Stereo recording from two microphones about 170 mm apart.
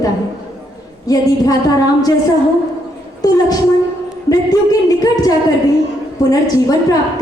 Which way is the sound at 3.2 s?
20° left (ahead or behind).